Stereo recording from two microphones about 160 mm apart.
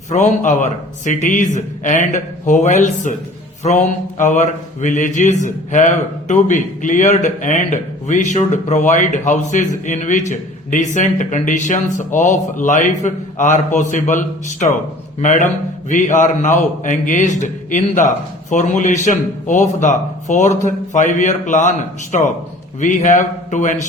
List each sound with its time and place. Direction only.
0.1 s mantra: 50° left (ahead or behind)